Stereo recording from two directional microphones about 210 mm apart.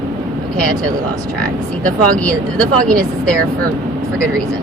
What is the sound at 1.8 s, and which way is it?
Speech, 5° left (ahead or behind).